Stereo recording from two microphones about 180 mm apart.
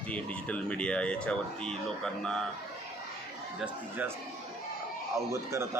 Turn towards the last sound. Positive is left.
turn(degrees=-15)  # may be behind; listen again after turning